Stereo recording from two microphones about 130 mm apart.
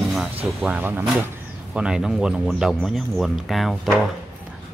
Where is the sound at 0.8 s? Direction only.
15° right (ahead or behind).